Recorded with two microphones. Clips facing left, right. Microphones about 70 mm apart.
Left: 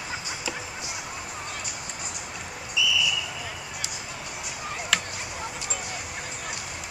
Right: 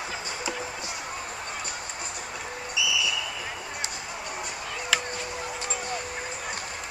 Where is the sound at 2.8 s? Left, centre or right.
Centre.